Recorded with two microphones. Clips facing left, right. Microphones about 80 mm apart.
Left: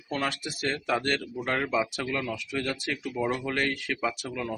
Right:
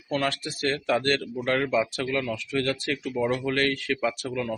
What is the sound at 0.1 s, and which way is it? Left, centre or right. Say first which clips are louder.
Speech: right 3 dB; centre.